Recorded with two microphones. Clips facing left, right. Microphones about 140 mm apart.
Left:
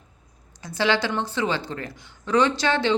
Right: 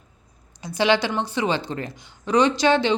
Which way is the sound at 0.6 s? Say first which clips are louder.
Right 3 dB; 15° right (ahead or behind).